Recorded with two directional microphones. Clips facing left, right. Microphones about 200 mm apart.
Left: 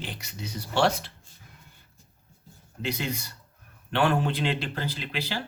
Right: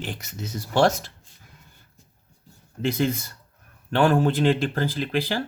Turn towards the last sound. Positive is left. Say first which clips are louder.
# right 8 dB
turn(degrees=-50)  # may be behind; listen again after turning